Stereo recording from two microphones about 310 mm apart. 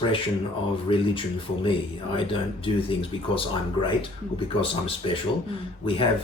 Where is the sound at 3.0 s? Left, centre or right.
Centre.